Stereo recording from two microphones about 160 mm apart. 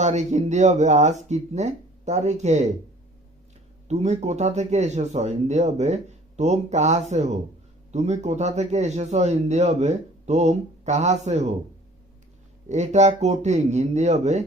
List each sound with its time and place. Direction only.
0.0 s a man's voice: 45° right (ahead or behind)
3.8 s a man's voice: 45° right (ahead or behind)
12.6 s a man's voice: 45° right (ahead or behind)